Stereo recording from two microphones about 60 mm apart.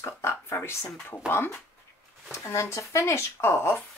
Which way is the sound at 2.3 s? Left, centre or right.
Left.